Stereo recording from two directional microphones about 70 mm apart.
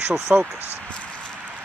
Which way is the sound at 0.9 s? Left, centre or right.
Centre.